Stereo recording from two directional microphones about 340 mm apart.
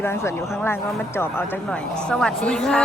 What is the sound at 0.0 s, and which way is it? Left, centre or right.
A woman's voice, centre.